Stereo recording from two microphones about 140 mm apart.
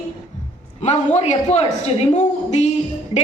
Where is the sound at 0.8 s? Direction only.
50° left (ahead or behind).